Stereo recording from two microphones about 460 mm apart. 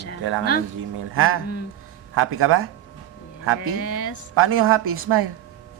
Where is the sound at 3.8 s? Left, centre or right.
Left.